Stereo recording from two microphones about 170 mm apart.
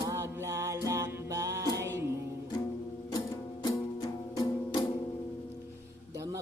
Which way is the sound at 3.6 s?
25° left (ahead or behind).